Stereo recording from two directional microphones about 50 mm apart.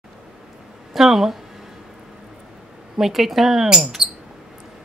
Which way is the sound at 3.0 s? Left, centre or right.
Centre.